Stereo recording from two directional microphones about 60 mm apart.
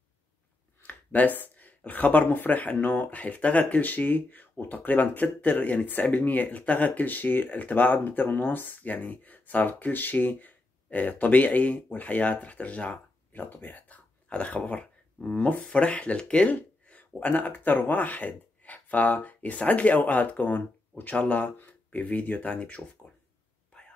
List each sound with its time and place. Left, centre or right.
0.8 s speech: left
13.4 s speech: left